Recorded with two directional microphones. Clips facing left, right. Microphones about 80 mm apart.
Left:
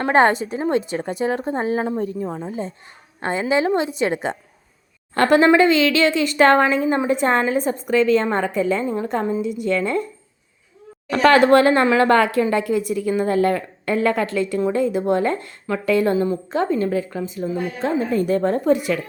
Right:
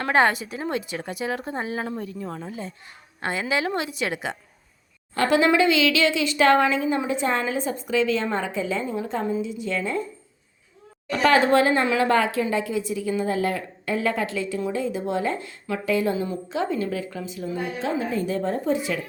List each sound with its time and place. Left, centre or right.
0.0 s a woman's voice: left
5.1 s a woman's voice: left
5.5 s a woman's voice: left
11.1 s a woman's voice: left